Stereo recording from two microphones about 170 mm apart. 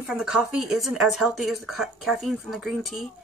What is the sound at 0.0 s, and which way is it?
Speech, 5° right (ahead or behind).